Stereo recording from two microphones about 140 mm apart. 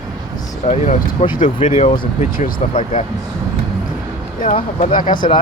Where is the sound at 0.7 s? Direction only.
55° left (ahead or behind).